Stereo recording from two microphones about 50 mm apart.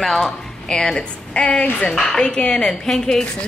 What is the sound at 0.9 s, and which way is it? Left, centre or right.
A woman's voice, centre.